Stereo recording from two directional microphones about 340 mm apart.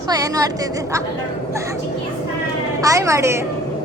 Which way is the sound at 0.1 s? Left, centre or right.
Centre.